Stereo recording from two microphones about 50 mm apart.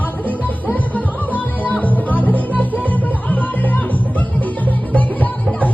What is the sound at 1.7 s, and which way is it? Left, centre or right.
Music, left.